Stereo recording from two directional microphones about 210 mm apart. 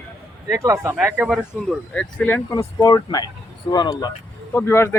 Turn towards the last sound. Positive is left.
turn(degrees=10)  # may be behind; listen again after turning